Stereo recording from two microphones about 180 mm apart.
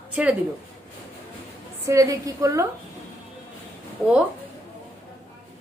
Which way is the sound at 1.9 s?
20° right (ahead or behind).